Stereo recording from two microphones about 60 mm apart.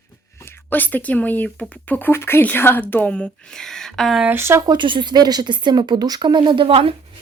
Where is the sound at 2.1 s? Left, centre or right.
Left.